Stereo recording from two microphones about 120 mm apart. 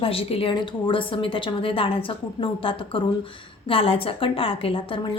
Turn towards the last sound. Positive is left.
turn(degrees=45)  # may be behind; listen again after turning